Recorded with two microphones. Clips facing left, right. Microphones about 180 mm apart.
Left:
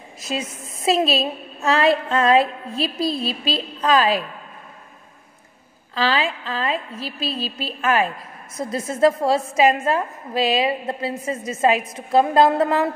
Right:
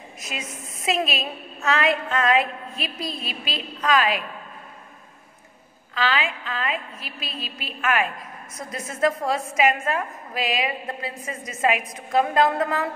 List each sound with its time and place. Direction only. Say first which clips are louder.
0.2 s a woman's voice: left 8 dB; 30° left (ahead or behind)
5.9 s a woman's voice: left 3 dB; 35° left (ahead or behind)